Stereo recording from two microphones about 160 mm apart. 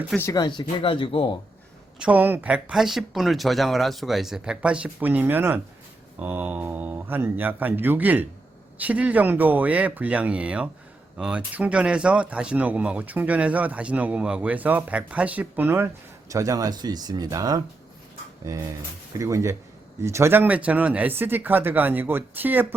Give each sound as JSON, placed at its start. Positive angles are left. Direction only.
{"t": 0.2, "sound": "speech", "side_deg": 20}
{"t": 2.0, "sound": "speech", "side_deg": -10}